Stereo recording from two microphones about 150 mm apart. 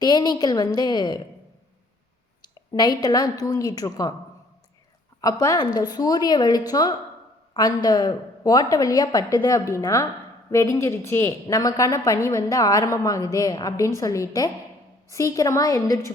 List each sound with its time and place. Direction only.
0.0 s a woman's voice: 30° left (ahead or behind)
2.6 s a woman's voice: 30° left (ahead or behind)
5.2 s a woman's voice: 25° left (ahead or behind)